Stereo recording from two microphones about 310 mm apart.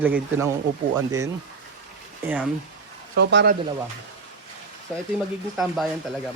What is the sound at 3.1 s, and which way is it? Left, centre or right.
Speech, right.